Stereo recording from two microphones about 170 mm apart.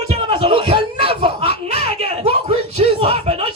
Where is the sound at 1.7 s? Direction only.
65° left (ahead or behind).